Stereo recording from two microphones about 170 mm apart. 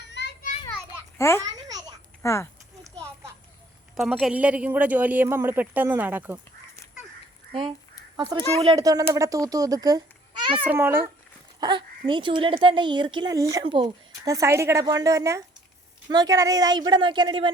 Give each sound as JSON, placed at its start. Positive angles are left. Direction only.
{"t": 0.1, "sound": "children playing", "side_deg": 80}
{"t": 1.4, "sound": "babbling", "side_deg": -20}
{"t": 2.2, "sound": "speech", "side_deg": 15}
{"t": 3.9, "sound": "speech", "side_deg": 0}
{"t": 8.1, "sound": "speech", "side_deg": -20}
{"t": 10.6, "sound": "speech", "side_deg": -10}
{"t": 11.6, "sound": "speech", "side_deg": -30}